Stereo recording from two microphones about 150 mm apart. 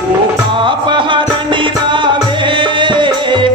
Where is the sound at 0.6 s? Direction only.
35° right (ahead or behind).